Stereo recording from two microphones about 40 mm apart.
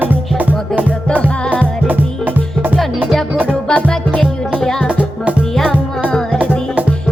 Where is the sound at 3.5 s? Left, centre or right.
Left.